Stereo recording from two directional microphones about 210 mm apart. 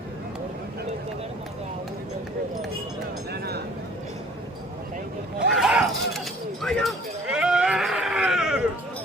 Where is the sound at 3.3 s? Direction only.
50° right (ahead or behind).